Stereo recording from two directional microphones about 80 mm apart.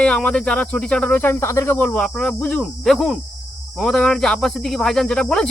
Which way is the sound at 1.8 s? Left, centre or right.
Centre.